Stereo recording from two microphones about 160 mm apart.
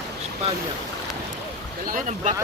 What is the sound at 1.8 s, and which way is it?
Speech, 55° right (ahead or behind).